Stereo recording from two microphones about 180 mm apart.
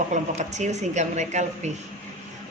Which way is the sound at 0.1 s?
40° right (ahead or behind).